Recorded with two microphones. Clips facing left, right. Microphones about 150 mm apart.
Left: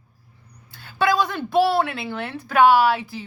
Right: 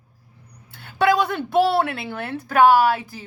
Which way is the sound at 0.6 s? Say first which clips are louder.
Right 2 dB; 60° right (ahead or behind).